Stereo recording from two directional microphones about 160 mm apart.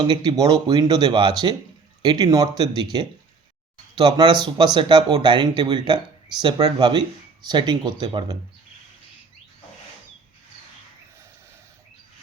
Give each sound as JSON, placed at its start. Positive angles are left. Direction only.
{"t": 0.0, "sound": "speech", "side_deg": -30}
{"t": 3.9, "sound": "speech", "side_deg": -25}